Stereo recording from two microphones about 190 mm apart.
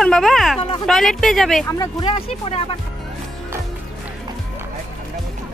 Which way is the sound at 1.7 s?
20° left (ahead or behind).